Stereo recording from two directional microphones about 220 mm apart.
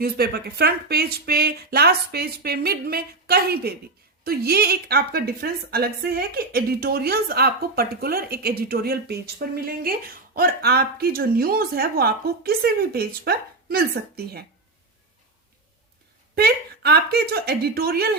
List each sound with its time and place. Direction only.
0.0 s a woman's voice: 45° right (ahead or behind)
16.3 s a woman's voice: 45° right (ahead or behind)